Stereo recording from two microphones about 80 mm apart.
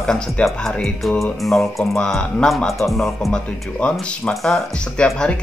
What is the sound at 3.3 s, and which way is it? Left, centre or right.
Speech, centre.